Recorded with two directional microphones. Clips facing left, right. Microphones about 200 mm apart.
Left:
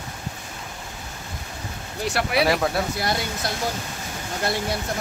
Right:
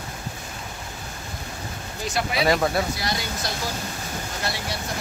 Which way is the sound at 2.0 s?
70° left (ahead or behind).